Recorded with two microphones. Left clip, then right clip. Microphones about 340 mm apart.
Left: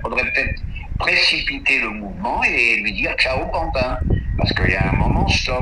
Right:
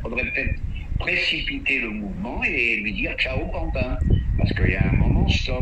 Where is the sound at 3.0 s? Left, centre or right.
Left.